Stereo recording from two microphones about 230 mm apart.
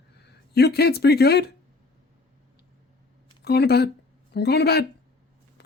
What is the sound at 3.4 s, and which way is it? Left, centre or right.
Speech, left.